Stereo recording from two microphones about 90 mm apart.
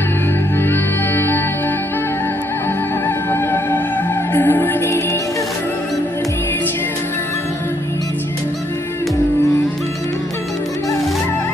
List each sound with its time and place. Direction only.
0.7 s music: 25° left (ahead or behind)
3.3 s music: 25° left (ahead or behind)